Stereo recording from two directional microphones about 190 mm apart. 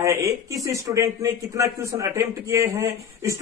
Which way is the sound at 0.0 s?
15° right (ahead or behind).